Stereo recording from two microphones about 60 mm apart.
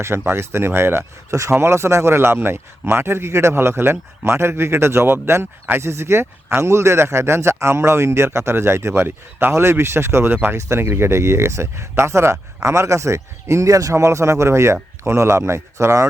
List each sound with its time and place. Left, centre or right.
0.3 s speech: right
1.3 s speech: right